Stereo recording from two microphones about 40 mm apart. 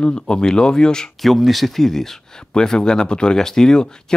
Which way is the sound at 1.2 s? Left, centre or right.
Centre.